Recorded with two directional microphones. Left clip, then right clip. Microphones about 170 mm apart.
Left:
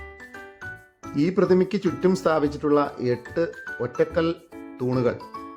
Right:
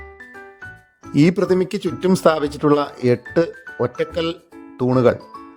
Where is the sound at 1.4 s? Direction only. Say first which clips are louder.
Right 2 dB; 45° right (ahead or behind).